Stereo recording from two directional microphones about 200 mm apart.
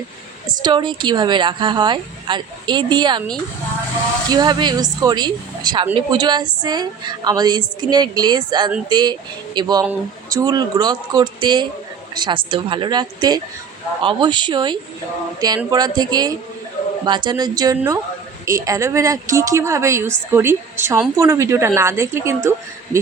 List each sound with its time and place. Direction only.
0.4 s speech: 20° right (ahead or behind)
4.3 s a woman's voice: 20° right (ahead or behind)